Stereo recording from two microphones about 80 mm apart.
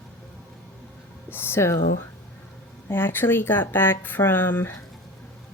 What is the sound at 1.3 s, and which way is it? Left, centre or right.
Speech, left.